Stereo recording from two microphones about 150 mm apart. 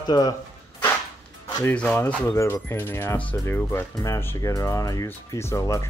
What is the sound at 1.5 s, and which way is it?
Speech, 10° left (ahead or behind).